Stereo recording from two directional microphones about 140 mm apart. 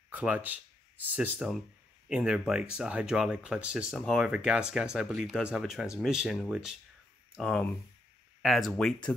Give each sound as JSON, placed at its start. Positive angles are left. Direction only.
{"t": 0.1, "sound": "speech", "side_deg": -10}